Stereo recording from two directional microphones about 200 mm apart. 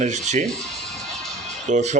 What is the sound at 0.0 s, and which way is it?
Speech, 35° right (ahead or behind).